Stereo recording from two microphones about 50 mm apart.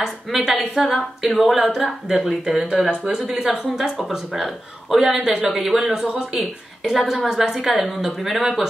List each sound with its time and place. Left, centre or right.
0.0 s a woman's voice: centre
5.0 s speech: right
5.5 s a woman's voice: centre